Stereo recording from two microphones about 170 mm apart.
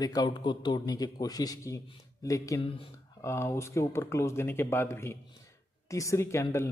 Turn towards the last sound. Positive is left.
turn(degrees=15)  # may be behind; listen again after turning